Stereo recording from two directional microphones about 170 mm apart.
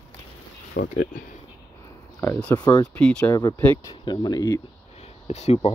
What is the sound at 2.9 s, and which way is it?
Speech, 5° left (ahead or behind).